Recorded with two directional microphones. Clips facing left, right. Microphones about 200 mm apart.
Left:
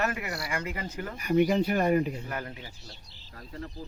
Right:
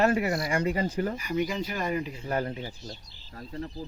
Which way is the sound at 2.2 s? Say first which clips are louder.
Right 7 dB; 30° right (ahead or behind).